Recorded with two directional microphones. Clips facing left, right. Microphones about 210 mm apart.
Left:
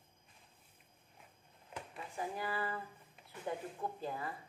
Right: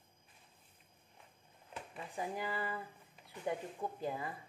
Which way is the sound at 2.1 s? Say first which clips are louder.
Even; 15° right (ahead or behind).